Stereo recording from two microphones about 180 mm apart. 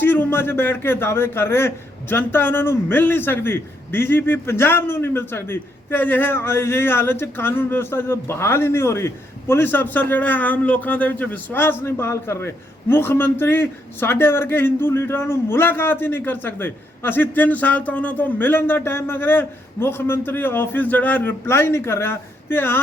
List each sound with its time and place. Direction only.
0.0 s a man's voice: 10° left (ahead or behind)